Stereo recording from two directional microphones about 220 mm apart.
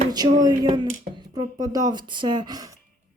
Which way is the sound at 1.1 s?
15° right (ahead or behind).